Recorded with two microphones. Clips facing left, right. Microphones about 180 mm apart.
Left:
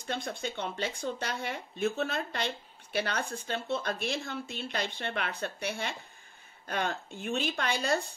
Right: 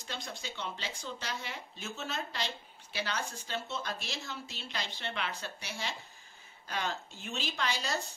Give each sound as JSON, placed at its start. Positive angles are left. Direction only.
{"t": 0.0, "sound": "speech", "side_deg": 55}